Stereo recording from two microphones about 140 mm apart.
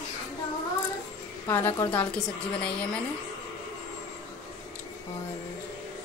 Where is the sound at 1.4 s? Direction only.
15° left (ahead or behind).